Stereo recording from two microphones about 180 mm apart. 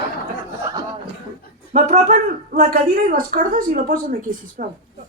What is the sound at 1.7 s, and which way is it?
Speech, 40° right (ahead or behind).